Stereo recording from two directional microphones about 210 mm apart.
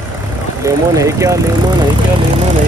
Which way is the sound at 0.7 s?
15° right (ahead or behind).